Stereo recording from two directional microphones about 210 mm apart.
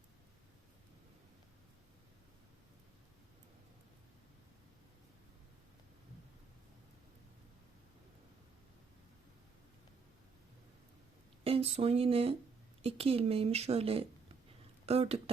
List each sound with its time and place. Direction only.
11.4 s a woman's voice: 30° right (ahead or behind)